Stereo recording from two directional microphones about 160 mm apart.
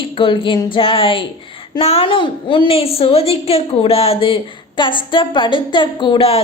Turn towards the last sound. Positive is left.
turn(degrees=35)  # may be behind; listen again after turning